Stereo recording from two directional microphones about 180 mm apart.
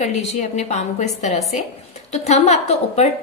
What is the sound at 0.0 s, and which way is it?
Speech, 40° left (ahead or behind).